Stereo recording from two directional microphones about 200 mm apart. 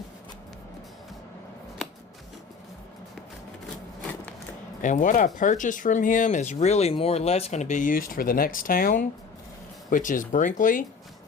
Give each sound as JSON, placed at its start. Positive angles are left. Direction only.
{"t": 4.8, "sound": "speech", "side_deg": 40}